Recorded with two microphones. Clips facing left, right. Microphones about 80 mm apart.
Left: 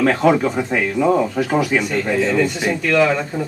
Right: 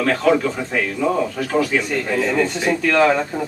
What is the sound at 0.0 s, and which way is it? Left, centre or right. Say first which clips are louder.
Speech: left 2 dB; centre.